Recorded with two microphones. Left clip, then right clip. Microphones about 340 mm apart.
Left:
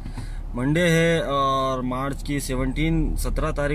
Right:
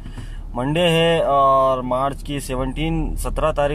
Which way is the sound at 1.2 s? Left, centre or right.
Right.